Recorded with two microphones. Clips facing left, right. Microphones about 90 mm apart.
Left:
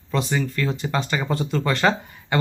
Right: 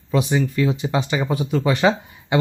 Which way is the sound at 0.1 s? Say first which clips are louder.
Right 4 dB; 15° right (ahead or behind).